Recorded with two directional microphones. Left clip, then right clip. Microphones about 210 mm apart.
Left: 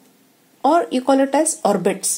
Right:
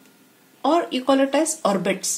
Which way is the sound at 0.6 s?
35° left (ahead or behind).